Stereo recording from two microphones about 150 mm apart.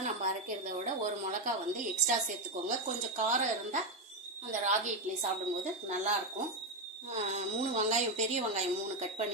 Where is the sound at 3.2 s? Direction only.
55° right (ahead or behind).